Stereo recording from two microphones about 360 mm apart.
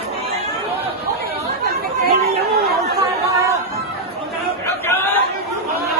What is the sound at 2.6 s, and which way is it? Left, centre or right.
Chatter, right.